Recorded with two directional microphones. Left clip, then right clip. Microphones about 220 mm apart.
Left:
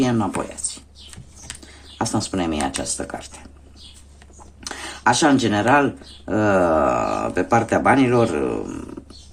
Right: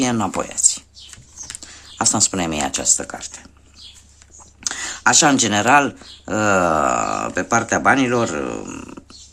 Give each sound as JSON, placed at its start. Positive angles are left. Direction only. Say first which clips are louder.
{"t": 0.0, "sound": "speech", "louder": "right 1 dB", "side_deg": -35}
{"t": 1.6, "sound": "speech", "louder": "right 5 dB", "side_deg": -30}
{"t": 4.6, "sound": "speech", "louder": "right 1 dB", "side_deg": -20}